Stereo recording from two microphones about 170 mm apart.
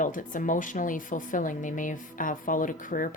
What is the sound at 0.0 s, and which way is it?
Speech, 50° left (ahead or behind).